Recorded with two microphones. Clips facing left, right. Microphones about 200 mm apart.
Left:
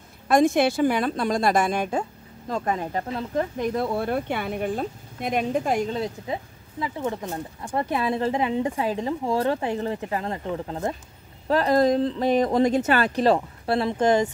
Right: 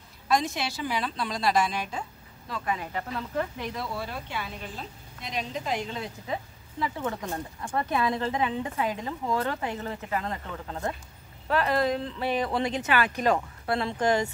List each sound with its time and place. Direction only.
0.3 s a woman's voice: 50° left (ahead or behind); by 11.0 s 25° left (ahead or behind)
11.4 s a woman's voice: 35° left (ahead or behind)